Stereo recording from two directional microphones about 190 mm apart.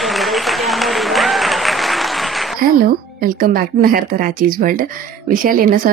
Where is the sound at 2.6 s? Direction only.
50° right (ahead or behind).